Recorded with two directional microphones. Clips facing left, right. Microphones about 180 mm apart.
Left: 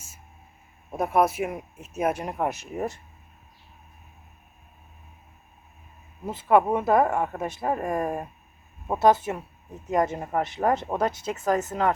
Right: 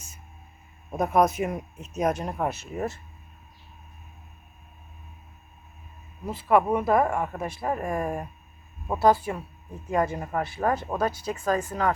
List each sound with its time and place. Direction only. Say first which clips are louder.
0.9 s speech: right 1 dB; 5° left (ahead or behind)
6.2 s speech: left 1 dB; 25° left (ahead or behind)